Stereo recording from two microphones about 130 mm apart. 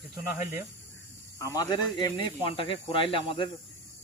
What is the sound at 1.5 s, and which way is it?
Speech, 30° left (ahead or behind).